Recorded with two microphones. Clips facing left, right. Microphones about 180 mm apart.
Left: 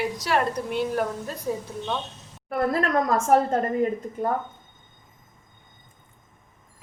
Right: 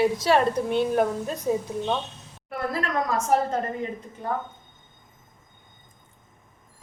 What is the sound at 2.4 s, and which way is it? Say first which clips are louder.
A woman's voice: left 5 dB; 45° left (ahead or behind).